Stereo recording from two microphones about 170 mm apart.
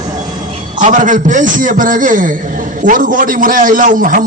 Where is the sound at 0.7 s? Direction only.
50° right (ahead or behind).